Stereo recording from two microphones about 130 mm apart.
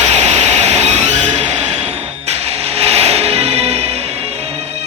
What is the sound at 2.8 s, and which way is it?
Music, 55° right (ahead or behind).